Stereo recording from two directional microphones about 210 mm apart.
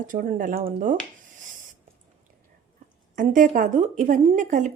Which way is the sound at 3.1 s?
40° right (ahead or behind).